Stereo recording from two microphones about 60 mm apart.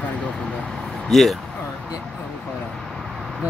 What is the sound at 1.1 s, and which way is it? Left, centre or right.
Speech, centre.